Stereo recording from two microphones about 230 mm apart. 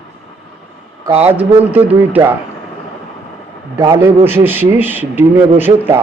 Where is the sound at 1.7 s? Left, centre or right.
Centre.